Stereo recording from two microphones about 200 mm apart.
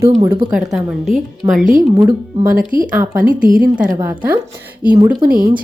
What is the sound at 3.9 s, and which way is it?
Speech, 10° right (ahead or behind).